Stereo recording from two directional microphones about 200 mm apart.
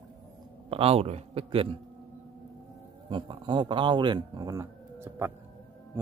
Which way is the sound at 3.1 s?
25° right (ahead or behind).